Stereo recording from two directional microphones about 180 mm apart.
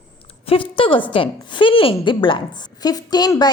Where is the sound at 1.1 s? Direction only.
25° left (ahead or behind).